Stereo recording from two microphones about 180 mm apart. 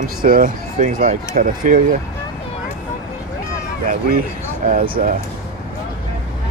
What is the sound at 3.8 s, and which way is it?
Speech, 50° right (ahead or behind).